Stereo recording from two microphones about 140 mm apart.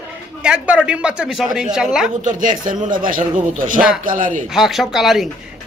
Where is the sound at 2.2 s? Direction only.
70° right (ahead or behind).